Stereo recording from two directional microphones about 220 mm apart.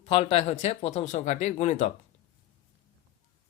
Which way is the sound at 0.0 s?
25° left (ahead or behind).